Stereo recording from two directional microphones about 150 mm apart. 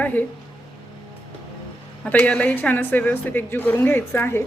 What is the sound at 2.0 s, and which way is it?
A woman's voice, 10° left (ahead or behind).